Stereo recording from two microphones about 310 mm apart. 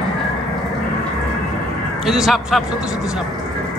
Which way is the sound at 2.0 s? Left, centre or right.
Centre.